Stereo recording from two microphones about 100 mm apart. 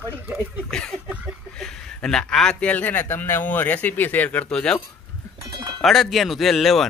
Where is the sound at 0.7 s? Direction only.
5° left (ahead or behind).